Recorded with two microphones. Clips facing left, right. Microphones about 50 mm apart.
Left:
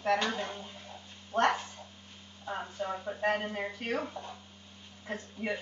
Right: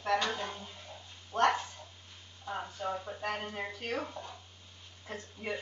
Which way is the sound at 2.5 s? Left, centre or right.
Centre.